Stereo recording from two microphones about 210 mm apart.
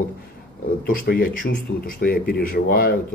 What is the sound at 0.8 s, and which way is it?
Speech, 45° left (ahead or behind).